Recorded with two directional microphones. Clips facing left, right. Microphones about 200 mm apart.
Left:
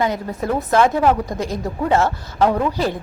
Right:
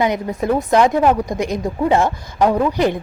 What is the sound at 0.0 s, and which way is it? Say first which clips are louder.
A woman's voice: right 3 dB; 15° right (ahead or behind).